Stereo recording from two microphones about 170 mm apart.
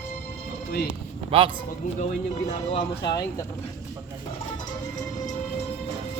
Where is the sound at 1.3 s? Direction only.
30° right (ahead or behind).